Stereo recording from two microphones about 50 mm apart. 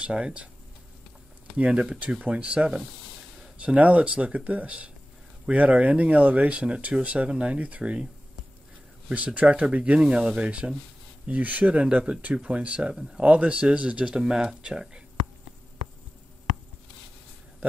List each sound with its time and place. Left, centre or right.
0.0 s speech: right
1.6 s speech: centre
9.1 s speech: right
9.9 s speech: centre
12.9 s speech: centre
13.2 s speech: right